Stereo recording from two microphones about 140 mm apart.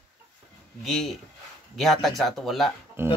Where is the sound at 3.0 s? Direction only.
15° right (ahead or behind).